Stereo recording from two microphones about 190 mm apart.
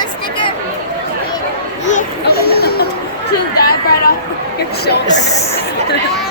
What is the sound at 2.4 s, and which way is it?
Music, 55° left (ahead or behind).